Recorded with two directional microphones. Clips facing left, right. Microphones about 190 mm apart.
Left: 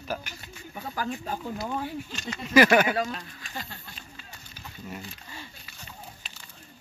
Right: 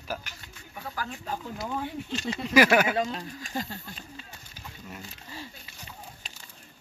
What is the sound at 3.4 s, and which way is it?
Speech, 40° right (ahead or behind).